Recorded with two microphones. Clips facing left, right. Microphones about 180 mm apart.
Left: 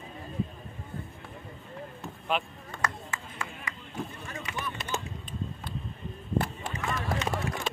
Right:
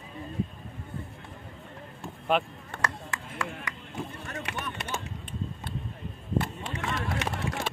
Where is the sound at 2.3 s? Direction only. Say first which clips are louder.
Right 4 dB; 70° right (ahead or behind).